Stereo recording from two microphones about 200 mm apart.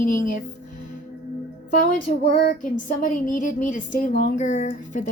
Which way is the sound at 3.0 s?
40° left (ahead or behind).